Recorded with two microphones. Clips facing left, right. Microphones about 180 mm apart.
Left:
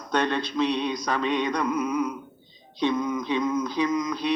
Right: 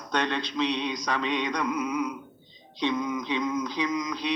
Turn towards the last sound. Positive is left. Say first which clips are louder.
# left 4 dB
turn(degrees=50)  # may be behind; listen again after turning